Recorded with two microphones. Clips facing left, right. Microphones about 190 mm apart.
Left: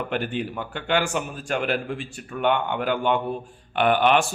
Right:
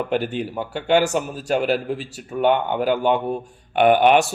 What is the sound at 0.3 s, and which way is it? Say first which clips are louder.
Speech: right 2 dB; 40° right (ahead or behind).